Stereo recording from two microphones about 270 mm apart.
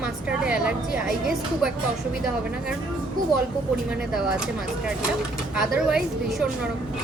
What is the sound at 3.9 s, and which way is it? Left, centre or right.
A woman's voice, centre.